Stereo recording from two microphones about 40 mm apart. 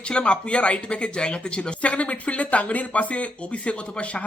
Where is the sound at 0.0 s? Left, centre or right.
Left.